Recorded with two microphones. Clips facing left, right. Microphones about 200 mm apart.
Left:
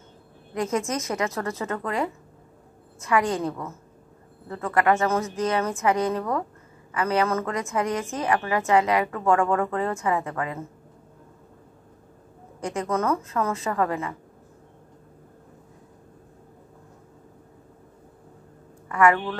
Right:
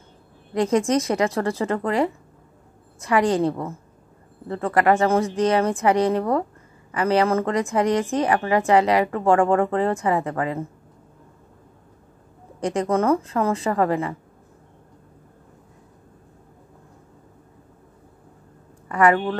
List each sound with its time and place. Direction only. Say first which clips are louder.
0.6 s a woman's voice: right 7 dB; 30° right (ahead or behind)
12.5 s a woman's voice: right 5 dB; 30° right (ahead or behind)
18.9 s speech: right 2 dB; 30° right (ahead or behind)